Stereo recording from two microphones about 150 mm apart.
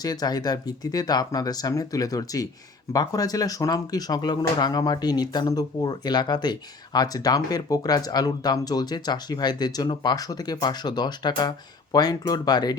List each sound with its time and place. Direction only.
0.0 s speech: 25° left (ahead or behind)